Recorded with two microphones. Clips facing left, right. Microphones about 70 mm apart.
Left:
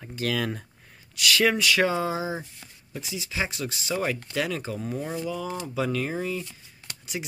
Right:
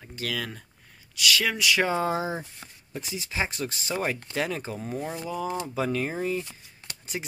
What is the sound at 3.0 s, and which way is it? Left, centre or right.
Speech, right.